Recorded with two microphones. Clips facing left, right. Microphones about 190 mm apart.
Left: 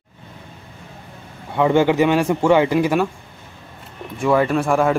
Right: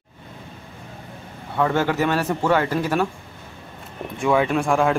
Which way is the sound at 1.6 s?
15° left (ahead or behind).